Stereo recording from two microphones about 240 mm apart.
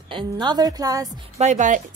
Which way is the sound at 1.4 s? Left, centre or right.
Right.